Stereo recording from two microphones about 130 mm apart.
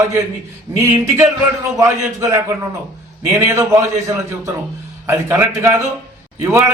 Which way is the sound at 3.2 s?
20° right (ahead or behind).